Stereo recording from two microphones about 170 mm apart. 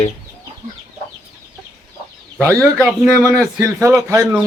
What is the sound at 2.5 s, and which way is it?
Speech, 5° left (ahead or behind).